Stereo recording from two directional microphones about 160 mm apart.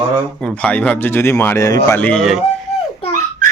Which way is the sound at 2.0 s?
5° left (ahead or behind).